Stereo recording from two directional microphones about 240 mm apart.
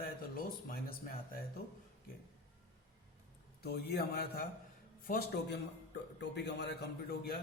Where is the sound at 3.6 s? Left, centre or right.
Left.